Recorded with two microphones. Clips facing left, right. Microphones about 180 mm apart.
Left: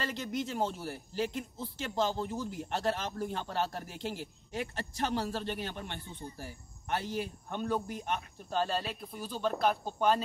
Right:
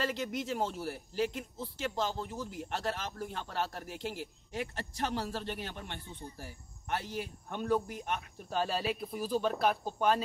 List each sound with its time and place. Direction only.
0.0 s speech: 5° right (ahead or behind)
4.6 s speech: 25° left (ahead or behind)
7.4 s speech: 5° right (ahead or behind)